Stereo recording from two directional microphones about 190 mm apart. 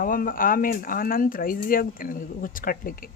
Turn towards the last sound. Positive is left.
turn(degrees=50)  # may be behind; listen again after turning